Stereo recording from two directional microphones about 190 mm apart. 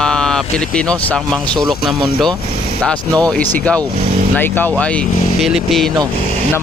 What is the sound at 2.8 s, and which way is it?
Speech, 5° left (ahead or behind).